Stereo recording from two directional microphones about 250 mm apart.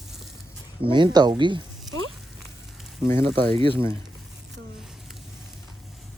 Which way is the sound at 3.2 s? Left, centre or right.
Right.